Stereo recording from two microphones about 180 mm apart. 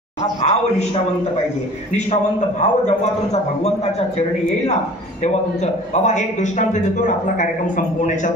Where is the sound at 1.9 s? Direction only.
40° left (ahead or behind).